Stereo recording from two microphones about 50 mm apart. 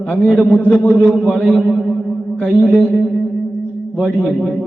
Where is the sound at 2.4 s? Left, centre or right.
Centre.